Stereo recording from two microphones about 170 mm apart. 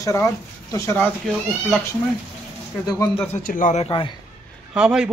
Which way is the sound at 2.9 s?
20° left (ahead or behind).